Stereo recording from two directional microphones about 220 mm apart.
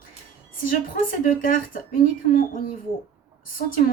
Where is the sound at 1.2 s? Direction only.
40° left (ahead or behind).